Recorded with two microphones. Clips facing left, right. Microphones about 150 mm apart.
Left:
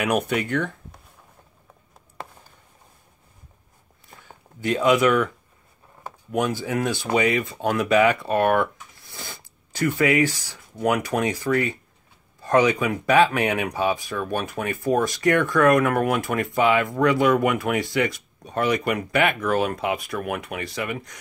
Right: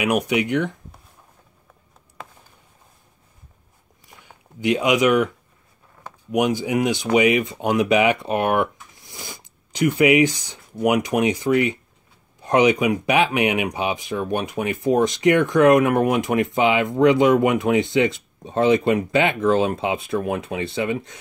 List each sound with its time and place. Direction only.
0.0 s speech: 10° right (ahead or behind)
4.2 s speech: 15° right (ahead or behind)
6.3 s speech: 15° right (ahead or behind)